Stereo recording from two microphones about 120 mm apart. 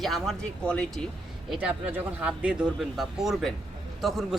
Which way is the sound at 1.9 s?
10° right (ahead or behind).